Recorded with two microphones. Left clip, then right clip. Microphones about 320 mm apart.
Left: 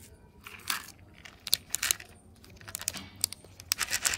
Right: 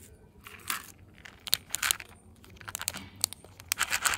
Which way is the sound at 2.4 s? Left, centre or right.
Centre.